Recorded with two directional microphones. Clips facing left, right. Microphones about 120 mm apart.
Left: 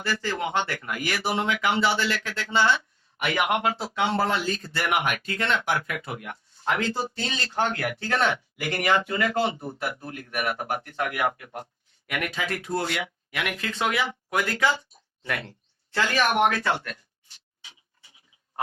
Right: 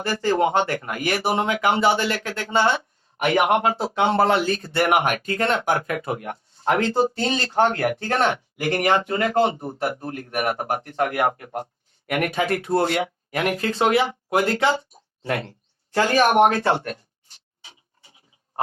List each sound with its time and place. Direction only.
0.0 s speech: 45° right (ahead or behind)
4.1 s speech: 60° right (ahead or behind); by 18.1 s 40° right (ahead or behind)